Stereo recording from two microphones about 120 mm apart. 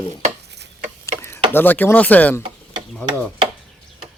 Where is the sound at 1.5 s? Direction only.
15° left (ahead or behind).